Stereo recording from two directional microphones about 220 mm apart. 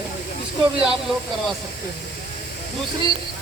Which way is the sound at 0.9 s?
Centre (ahead or behind).